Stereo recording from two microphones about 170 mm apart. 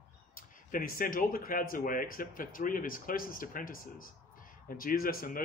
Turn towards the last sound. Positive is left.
turn(degrees=55)  # may be behind; listen again after turning